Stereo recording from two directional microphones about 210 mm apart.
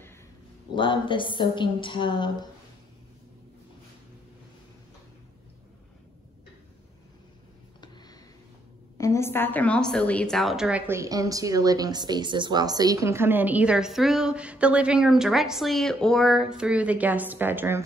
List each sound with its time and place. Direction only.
0.7 s a woman's voice: 25° left (ahead or behind)
8.9 s a woman's voice: 15° left (ahead or behind); by 17.8 s 10° right (ahead or behind)